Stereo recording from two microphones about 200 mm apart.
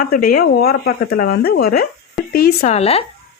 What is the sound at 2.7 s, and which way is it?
Speech, 30° left (ahead or behind).